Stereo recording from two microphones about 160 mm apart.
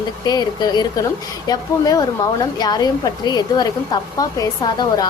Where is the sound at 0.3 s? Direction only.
25° left (ahead or behind).